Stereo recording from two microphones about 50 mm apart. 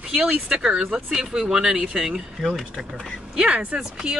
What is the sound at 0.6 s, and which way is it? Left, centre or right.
Speech, centre.